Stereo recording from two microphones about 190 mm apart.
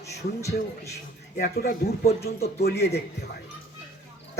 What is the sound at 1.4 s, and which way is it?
Speech, 50° left (ahead or behind).